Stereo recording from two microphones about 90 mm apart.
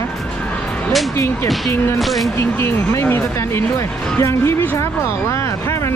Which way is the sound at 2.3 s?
30° left (ahead or behind).